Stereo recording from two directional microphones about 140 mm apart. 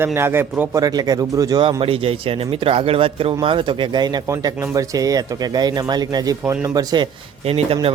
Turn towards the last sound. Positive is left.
turn(degrees=-45)  # may be behind; listen again after turning